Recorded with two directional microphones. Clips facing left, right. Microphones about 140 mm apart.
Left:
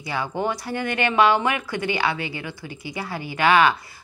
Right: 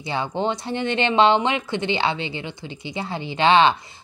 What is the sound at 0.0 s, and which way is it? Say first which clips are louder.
A woman's voice: right 1 dB; 25° right (ahead or behind).